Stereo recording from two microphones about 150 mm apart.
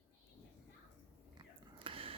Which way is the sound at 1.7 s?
35° right (ahead or behind).